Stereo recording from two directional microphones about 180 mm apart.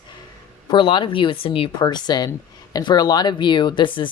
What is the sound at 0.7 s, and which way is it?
Speech, 25° left (ahead or behind).